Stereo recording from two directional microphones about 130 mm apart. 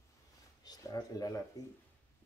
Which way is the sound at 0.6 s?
30° left (ahead or behind).